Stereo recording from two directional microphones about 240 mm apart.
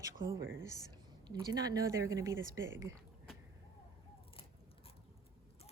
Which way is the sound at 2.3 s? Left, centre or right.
Right.